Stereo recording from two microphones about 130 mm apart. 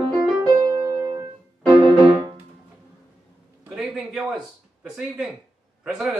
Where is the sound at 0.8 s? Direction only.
30° right (ahead or behind).